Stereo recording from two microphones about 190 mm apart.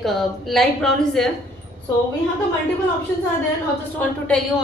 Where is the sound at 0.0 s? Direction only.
Centre (ahead or behind).